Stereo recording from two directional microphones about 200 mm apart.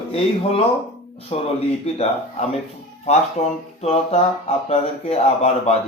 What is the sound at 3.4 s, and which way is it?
Speech, 35° left (ahead or behind).